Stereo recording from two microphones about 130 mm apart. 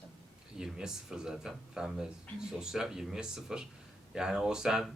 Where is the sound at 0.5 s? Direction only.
5° right (ahead or behind).